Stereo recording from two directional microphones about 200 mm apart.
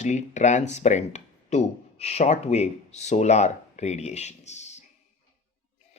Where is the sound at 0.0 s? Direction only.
35° left (ahead or behind).